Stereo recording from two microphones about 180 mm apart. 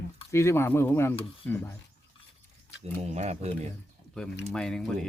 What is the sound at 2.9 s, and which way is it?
Speech, 40° right (ahead or behind).